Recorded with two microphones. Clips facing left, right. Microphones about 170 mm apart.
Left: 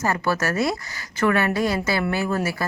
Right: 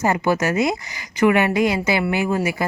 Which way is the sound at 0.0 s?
20° right (ahead or behind).